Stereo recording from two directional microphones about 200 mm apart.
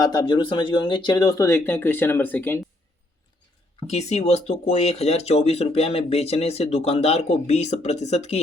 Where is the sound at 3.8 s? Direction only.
30° left (ahead or behind).